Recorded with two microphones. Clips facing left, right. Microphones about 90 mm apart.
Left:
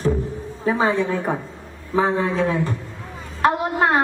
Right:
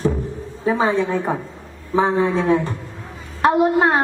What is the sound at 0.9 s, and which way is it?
A woman's voice, 30° right (ahead or behind).